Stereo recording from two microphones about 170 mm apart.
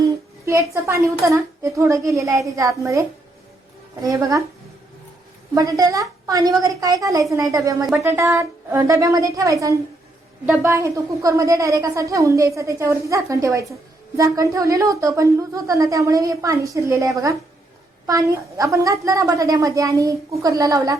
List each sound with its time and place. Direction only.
0.4 s a woman's voice: 15° right (ahead or behind)
4.0 s a woman's voice: 20° right (ahead or behind)
5.5 s a woman's voice: 20° right (ahead or behind)